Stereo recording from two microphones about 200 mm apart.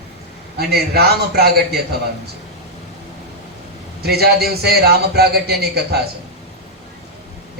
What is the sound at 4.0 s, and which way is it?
A man's voice, 50° right (ahead or behind).